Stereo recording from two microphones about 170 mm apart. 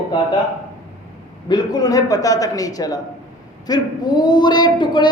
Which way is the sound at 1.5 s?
20° left (ahead or behind).